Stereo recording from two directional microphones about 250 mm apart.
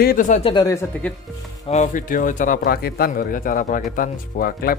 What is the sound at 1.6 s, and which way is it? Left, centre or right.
Speech, left.